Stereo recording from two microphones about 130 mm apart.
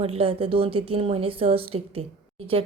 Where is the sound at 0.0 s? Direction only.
50° right (ahead or behind).